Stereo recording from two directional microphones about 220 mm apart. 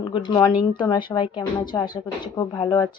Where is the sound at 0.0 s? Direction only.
20° left (ahead or behind).